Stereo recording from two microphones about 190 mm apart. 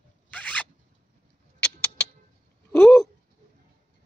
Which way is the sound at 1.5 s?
5° left (ahead or behind).